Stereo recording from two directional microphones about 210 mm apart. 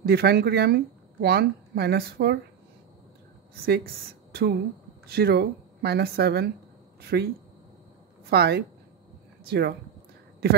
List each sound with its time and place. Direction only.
0.0 s speech: 50° right (ahead or behind)
3.6 s speech: 45° right (ahead or behind)
8.3 s speech: 50° right (ahead or behind)